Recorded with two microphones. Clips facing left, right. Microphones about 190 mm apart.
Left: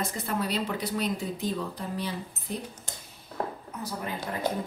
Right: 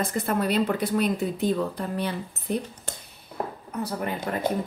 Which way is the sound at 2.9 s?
65° right (ahead or behind).